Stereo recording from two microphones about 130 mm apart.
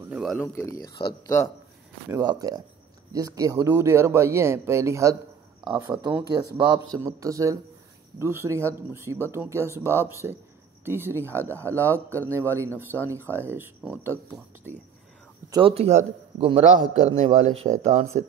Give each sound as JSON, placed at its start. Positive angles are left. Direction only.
{"t": 0.1, "sound": "speech", "side_deg": 0}
{"t": 0.4, "sound": "speech", "side_deg": 20}
{"t": 1.2, "sound": "speech", "side_deg": 20}
{"t": 2.2, "sound": "speech", "side_deg": -30}
{"t": 15.6, "sound": "a man's voice", "side_deg": -50}